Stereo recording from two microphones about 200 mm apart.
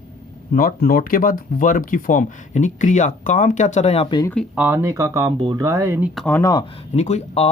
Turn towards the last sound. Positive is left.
turn(degrees=35)  # may be behind; listen again after turning